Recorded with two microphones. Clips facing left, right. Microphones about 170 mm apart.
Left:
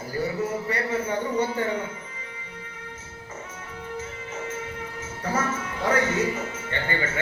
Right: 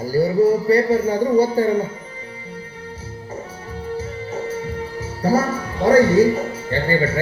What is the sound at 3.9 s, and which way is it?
Speech, 35° right (ahead or behind).